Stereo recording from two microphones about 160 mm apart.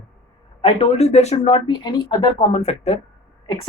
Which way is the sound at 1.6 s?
30° left (ahead or behind).